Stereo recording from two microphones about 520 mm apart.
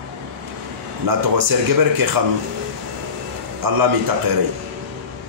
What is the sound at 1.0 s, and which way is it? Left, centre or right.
Speech, right.